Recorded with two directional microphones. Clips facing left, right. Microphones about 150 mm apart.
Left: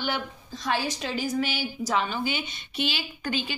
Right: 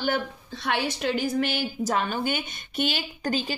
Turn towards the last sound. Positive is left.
turn(degrees=-40)  # may be behind; listen again after turning